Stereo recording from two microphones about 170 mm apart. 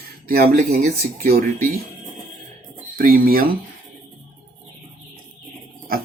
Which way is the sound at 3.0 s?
60° right (ahead or behind).